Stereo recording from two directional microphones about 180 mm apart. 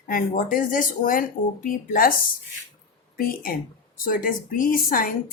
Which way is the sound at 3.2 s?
55° left (ahead or behind).